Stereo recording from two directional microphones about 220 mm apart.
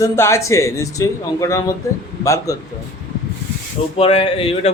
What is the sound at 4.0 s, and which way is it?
Speech, 25° left (ahead or behind).